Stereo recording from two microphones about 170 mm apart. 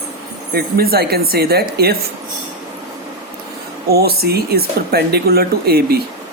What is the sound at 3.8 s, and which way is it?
Speech, 65° right (ahead or behind).